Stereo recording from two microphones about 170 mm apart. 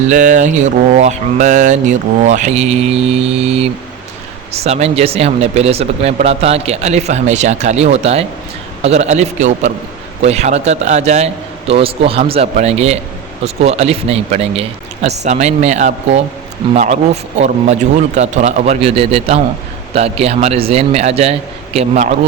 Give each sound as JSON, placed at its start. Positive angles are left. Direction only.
{"t": 0.1, "sound": "mantra", "side_deg": -50}
{"t": 4.5, "sound": "speech", "side_deg": -40}